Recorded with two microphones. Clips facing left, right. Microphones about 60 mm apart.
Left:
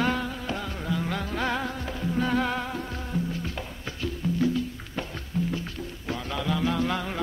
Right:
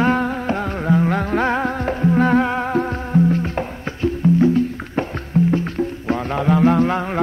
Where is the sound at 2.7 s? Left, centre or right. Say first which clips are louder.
Right 13 dB; right.